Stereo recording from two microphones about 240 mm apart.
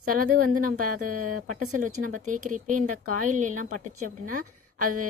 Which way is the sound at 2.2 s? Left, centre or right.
Right.